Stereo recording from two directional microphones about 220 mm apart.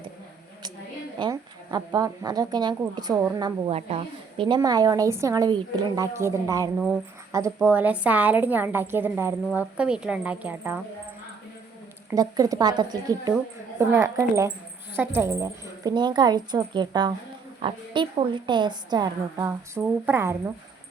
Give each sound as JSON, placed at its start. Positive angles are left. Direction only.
{"t": 1.2, "sound": "speech", "side_deg": -15}
{"t": 12.1, "sound": "a woman's voice", "side_deg": -15}